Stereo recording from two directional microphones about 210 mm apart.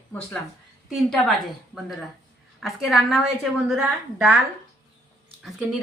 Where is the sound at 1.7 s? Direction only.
Centre (ahead or behind).